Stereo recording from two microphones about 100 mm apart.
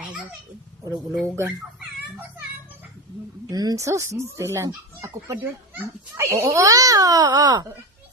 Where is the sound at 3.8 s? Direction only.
30° right (ahead or behind).